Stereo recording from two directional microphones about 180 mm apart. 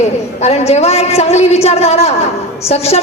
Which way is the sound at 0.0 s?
35° left (ahead or behind).